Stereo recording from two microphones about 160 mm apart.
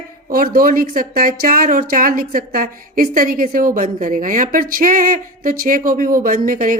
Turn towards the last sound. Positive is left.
turn(degrees=-60)  # may be behind; listen again after turning